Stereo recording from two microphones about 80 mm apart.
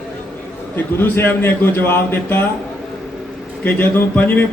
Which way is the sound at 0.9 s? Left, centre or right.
Left.